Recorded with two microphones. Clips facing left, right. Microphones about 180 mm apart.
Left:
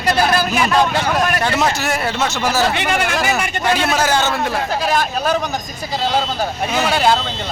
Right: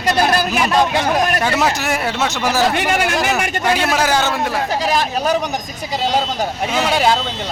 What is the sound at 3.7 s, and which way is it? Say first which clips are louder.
A man's voice: even; 10° right (ahead or behind).